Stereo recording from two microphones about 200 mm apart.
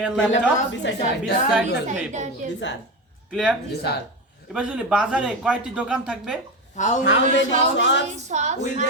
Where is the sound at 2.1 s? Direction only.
35° right (ahead or behind).